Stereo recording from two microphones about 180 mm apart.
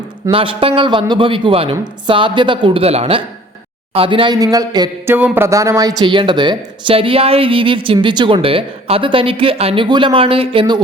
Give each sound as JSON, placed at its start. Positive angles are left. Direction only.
{"t": 0.3, "sound": "speech", "side_deg": -30}
{"t": 5.1, "sound": "speech", "side_deg": -10}